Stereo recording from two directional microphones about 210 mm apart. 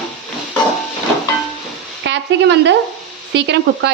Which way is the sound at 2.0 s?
60° right (ahead or behind).